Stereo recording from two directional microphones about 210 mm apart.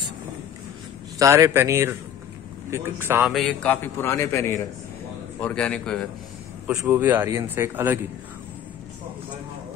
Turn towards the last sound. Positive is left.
turn(degrees=-10)  # may be behind; listen again after turning